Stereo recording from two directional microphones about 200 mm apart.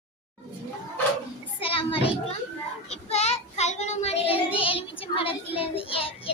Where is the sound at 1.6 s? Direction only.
25° left (ahead or behind).